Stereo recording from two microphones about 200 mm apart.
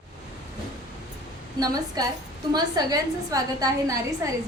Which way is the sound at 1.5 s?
20° right (ahead or behind).